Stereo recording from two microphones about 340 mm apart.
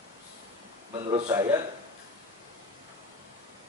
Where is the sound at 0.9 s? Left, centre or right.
Centre.